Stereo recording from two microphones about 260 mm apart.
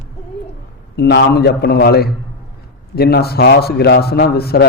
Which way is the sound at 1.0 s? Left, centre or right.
Left.